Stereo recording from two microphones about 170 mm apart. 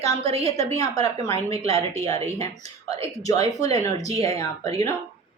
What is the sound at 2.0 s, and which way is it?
Speech, 20° left (ahead or behind).